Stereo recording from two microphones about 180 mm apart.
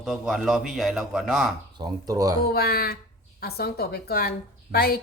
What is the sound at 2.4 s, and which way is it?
A woman's voice, 60° left (ahead or behind).